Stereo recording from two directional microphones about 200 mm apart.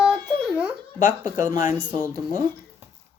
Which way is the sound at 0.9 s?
40° left (ahead or behind).